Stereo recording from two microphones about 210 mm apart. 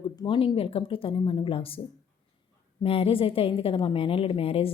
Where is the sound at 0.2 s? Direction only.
25° left (ahead or behind).